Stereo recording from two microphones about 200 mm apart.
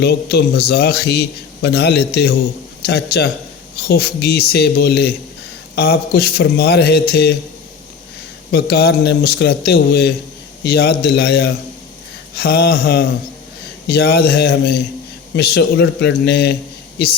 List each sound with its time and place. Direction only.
0.0 s a man's voice: 55° left (ahead or behind)
8.5 s a man's voice: 50° left (ahead or behind)